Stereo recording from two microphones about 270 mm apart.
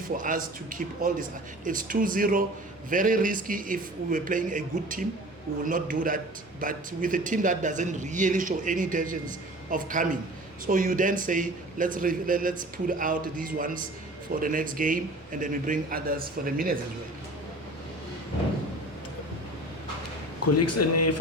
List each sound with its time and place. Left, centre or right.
0.2 s a man's voice: right
20.4 s speech: left